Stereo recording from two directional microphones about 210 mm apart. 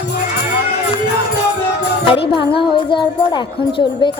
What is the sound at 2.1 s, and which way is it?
A woman's voice, 25° left (ahead or behind).